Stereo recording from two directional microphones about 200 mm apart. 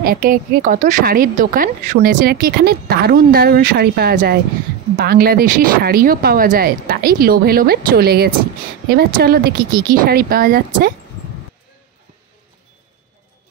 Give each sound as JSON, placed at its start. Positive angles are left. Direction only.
{"t": 0.0, "sound": "a woman's voice", "side_deg": -45}